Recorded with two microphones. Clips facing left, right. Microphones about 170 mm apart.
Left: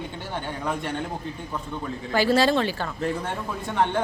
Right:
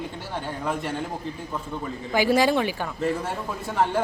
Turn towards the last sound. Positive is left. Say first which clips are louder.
# even
turn(degrees=-5)  # may be behind; listen again after turning